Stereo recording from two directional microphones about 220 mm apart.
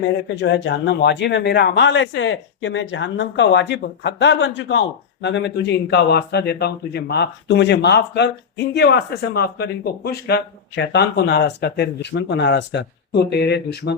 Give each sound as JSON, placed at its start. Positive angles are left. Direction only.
{"t": 0.3, "sound": "speech", "side_deg": 50}